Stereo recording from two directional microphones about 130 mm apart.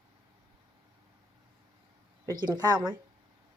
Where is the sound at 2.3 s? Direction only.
35° right (ahead or behind).